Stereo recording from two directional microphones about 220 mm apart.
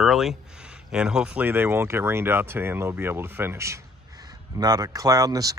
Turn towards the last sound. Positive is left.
turn(degrees=-15)  # may be behind; listen again after turning